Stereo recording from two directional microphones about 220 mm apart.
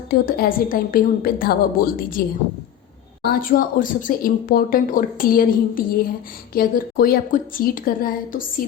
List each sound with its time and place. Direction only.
0.1 s speech: 45° left (ahead or behind)
3.2 s speech: 40° left (ahead or behind)